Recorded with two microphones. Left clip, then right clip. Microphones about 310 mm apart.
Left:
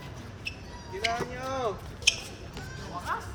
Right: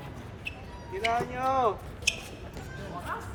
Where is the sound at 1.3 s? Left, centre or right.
Centre.